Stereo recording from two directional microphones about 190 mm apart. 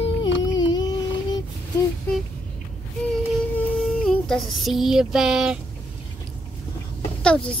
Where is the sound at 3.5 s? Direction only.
Centre (ahead or behind).